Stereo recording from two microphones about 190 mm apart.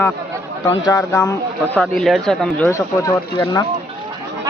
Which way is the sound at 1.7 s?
5° left (ahead or behind).